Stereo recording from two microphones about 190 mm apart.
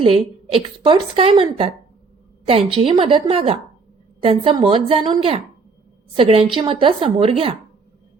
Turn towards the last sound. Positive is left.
turn(degrees=-30)  # may be behind; listen again after turning